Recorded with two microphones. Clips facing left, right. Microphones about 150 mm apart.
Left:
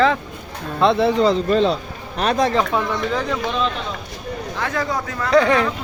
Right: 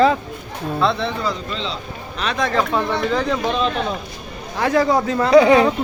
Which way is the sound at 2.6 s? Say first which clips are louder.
Right 1 dB; 10° left (ahead or behind).